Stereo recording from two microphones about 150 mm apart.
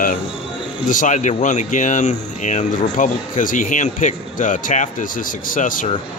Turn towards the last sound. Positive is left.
turn(degrees=65)  # may be behind; listen again after turning